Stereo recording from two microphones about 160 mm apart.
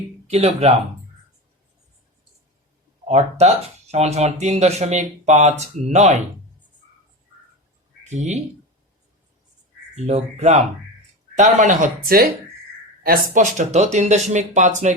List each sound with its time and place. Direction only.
0.3 s speech: 40° right (ahead or behind)
3.1 s speech: 45° right (ahead or behind)
8.1 s speech: 45° right (ahead or behind)
9.9 s speech: 40° right (ahead or behind)